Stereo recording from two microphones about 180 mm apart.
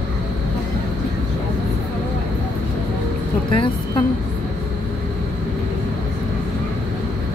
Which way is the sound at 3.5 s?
30° left (ahead or behind).